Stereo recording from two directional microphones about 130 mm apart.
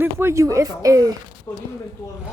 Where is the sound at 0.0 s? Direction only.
20° right (ahead or behind).